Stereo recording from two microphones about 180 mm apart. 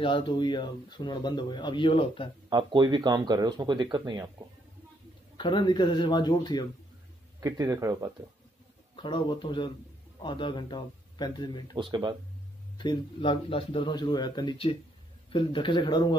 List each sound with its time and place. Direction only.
0.0 s speech: 25° left (ahead or behind)
2.5 s speech: 25° right (ahead or behind)
5.4 s speech: 25° left (ahead or behind)
7.3 s speech: 20° right (ahead or behind)
8.9 s speech: 25° left (ahead or behind)
11.7 s speech: 25° right (ahead or behind)
12.7 s speech: 25° left (ahead or behind)